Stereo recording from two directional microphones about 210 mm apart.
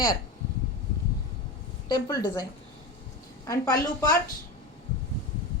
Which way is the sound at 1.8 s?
20° left (ahead or behind).